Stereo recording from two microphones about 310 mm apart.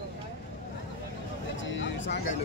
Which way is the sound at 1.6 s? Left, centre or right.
Left.